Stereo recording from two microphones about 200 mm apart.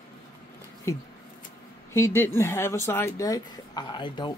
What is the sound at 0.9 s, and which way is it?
A man's voice, 15° left (ahead or behind).